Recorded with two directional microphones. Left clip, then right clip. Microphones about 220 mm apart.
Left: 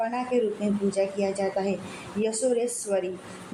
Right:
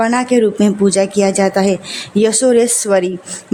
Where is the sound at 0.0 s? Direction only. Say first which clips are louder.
Right 13 dB; 50° right (ahead or behind).